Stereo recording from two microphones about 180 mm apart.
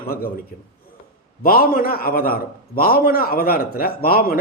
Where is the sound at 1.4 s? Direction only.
55° left (ahead or behind).